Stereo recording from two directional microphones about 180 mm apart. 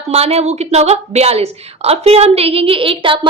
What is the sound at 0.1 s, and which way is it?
A woman's voice, 35° right (ahead or behind).